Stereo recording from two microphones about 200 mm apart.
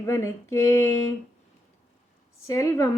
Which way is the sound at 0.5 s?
15° left (ahead or behind).